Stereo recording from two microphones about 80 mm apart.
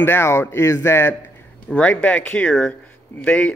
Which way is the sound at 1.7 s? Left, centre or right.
Centre.